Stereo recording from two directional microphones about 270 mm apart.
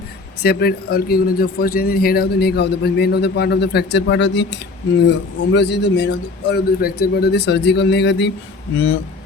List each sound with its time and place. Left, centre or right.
0.4 s a man's voice: left